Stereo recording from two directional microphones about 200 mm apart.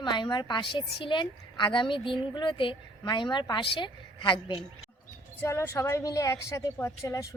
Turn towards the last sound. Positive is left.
turn(degrees=15)  # may be behind; listen again after turning